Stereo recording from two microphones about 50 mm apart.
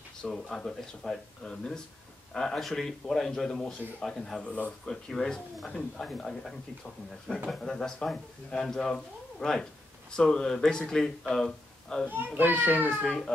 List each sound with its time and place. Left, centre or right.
0.2 s a man's voice: centre
4.4 s speech: left
4.8 s a man's voice: centre
12.6 s a child's voice: right
12.9 s a man's voice: centre